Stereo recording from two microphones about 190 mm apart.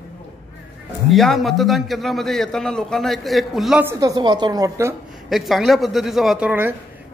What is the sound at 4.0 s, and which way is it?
Speech, 20° right (ahead or behind).